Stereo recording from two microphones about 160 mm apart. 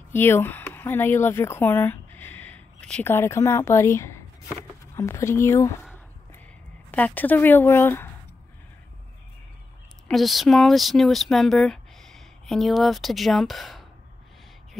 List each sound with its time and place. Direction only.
0.1 s speech: 15° left (ahead or behind)
6.9 s speech: 10° left (ahead or behind)
10.0 s speech: centre (ahead or behind)